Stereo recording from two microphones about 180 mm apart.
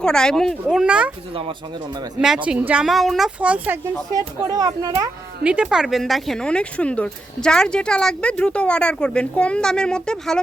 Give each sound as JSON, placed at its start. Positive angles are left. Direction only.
{"t": 0.0, "sound": "speech", "side_deg": 5}
{"t": 1.3, "sound": "speech", "side_deg": -30}
{"t": 2.2, "sound": "speech", "side_deg": -5}
{"t": 4.1, "sound": "speech", "side_deg": -20}
{"t": 5.4, "sound": "speech", "side_deg": -5}